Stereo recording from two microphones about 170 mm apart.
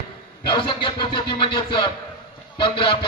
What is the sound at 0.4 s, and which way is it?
Speech, 30° left (ahead or behind).